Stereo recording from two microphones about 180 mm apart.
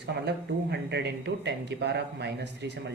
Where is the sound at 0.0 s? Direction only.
70° right (ahead or behind).